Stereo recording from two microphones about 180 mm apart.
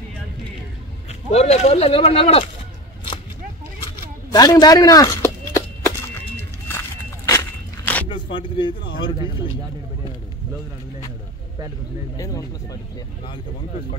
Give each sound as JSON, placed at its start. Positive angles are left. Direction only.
{"t": 1.3, "sound": "speech", "side_deg": 35}
{"t": 4.3, "sound": "a sound", "side_deg": 20}
{"t": 7.2, "sound": "walk", "side_deg": 15}
{"t": 8.1, "sound": "speech", "side_deg": 30}